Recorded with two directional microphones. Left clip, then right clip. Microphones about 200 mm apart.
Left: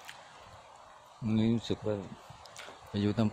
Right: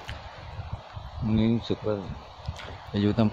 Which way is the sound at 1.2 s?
20° left (ahead or behind).